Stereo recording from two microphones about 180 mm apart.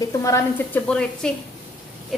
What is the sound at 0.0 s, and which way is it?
Speech, 15° left (ahead or behind).